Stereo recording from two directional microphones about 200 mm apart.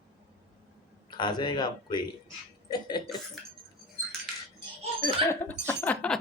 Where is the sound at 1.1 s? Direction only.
20° left (ahead or behind).